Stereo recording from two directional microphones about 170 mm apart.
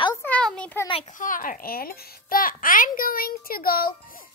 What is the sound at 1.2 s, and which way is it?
A child's voice, 55° left (ahead or behind).